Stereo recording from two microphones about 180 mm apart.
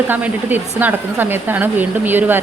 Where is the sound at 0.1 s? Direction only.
10° right (ahead or behind).